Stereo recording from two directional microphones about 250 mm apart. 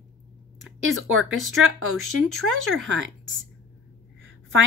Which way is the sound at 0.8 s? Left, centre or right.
Right.